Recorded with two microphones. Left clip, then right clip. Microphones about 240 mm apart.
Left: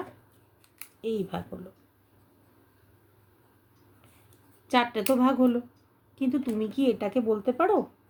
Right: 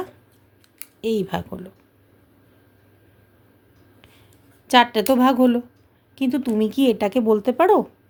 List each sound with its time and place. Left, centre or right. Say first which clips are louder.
1.0 s speech: right 8 dB; right
4.7 s a woman's voice: right 9 dB; right